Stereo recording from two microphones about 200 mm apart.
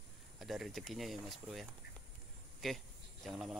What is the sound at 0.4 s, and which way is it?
Speech, centre (ahead or behind).